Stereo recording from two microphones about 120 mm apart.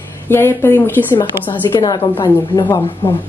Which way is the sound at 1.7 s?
30° left (ahead or behind).